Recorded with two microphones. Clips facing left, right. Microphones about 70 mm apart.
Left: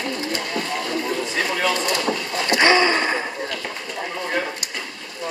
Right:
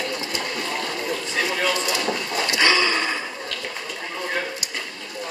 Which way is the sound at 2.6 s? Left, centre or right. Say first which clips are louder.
Left 4 dB; left.